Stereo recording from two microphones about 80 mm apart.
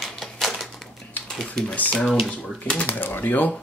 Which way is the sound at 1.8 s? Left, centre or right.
Centre.